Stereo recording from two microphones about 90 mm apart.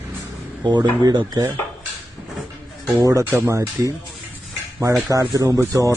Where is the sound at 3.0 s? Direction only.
40° right (ahead or behind).